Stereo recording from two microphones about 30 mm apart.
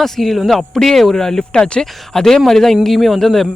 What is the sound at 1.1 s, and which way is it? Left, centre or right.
Speech, left.